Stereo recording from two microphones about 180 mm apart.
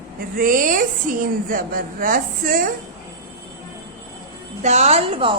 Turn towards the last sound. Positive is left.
turn(degrees=-30)  # may be behind; listen again after turning